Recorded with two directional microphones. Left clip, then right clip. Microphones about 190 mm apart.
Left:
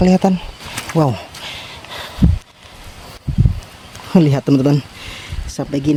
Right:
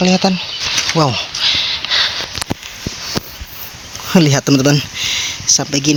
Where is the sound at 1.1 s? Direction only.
15° left (ahead or behind).